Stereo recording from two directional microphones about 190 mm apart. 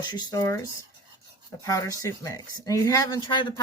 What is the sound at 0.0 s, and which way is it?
Speech, 20° left (ahead or behind).